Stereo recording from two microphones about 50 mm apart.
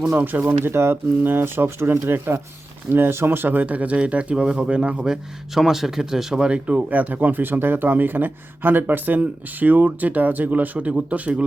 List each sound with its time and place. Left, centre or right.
0.4 s speech: right
1.2 s speech: right; by 6.5 s centre
6.5 s speech: right